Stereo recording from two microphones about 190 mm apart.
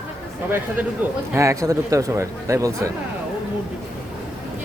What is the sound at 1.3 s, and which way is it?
Speech, 15° right (ahead or behind).